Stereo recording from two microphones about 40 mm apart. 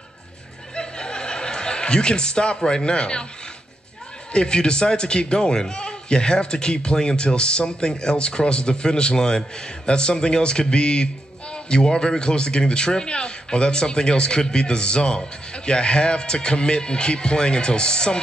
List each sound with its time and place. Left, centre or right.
0.7 s chuckle: left
4.3 s speech: left